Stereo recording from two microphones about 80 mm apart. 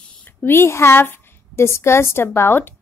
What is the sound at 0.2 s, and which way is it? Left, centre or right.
A woman's voice, left.